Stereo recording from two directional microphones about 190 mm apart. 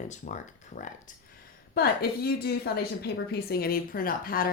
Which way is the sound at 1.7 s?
55° left (ahead or behind).